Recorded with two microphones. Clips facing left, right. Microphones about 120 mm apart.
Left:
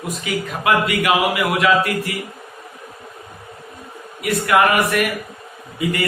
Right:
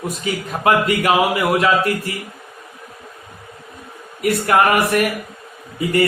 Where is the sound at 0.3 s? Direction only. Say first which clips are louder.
Right 2 dB; 35° right (ahead or behind).